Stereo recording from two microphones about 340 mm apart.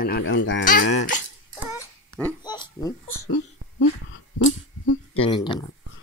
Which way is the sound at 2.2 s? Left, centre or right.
Centre.